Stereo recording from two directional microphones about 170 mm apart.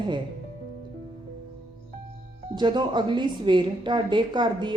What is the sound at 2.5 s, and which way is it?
Speech, 25° right (ahead or behind).